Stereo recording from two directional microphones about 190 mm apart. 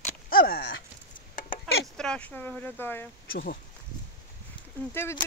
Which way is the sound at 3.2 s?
50° left (ahead or behind).